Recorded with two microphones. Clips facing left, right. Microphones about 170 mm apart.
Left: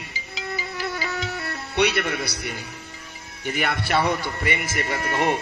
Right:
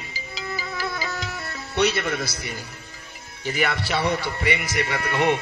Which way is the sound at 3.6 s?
55° left (ahead or behind).